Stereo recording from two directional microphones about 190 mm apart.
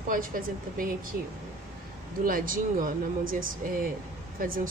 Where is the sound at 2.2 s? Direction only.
45° right (ahead or behind).